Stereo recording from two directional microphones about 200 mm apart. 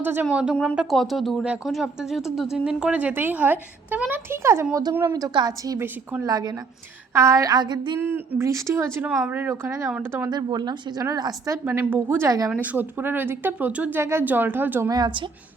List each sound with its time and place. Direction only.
0.0 s speech: 10° right (ahead or behind)